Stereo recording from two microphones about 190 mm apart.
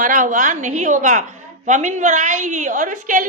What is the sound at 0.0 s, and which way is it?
A woman's voice, 45° right (ahead or behind).